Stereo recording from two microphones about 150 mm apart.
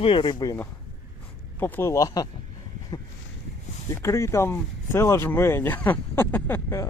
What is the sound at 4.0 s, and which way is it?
Speech, 20° left (ahead or behind).